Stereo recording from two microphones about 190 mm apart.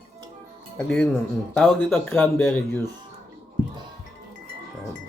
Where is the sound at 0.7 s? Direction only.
5° left (ahead or behind).